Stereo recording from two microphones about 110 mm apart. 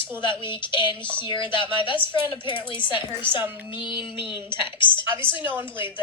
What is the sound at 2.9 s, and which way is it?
Speech, 20° right (ahead or behind).